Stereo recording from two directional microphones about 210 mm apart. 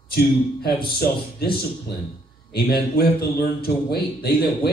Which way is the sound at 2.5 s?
45° left (ahead or behind).